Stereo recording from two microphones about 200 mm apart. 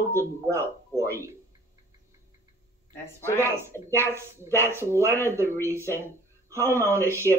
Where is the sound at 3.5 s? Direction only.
15° right (ahead or behind).